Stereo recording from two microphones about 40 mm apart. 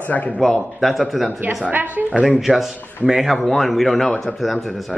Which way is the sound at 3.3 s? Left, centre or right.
Centre.